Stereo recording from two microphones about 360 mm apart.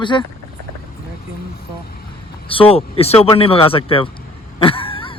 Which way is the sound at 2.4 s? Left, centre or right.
Centre.